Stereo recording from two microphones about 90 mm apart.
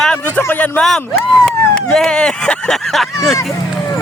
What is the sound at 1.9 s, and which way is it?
Speech, 5° left (ahead or behind).